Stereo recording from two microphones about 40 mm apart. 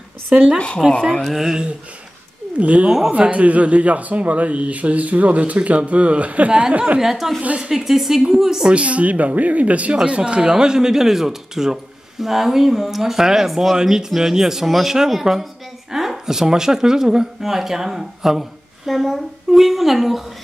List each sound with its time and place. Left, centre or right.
0.3 s speech: centre
2.6 s speech: right
7.0 s speech: centre
7.4 s speech: right
7.7 s speech: centre
8.7 s speech: right
10.4 s speech: centre